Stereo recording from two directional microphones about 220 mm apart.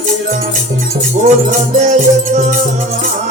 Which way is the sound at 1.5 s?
35° right (ahead or behind).